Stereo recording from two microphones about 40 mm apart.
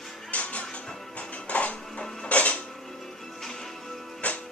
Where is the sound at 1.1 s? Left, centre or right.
Left.